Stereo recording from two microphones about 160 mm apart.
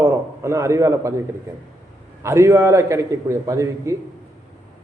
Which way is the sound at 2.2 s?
20° right (ahead or behind).